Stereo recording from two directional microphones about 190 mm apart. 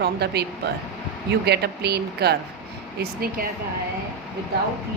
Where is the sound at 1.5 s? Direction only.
60° right (ahead or behind).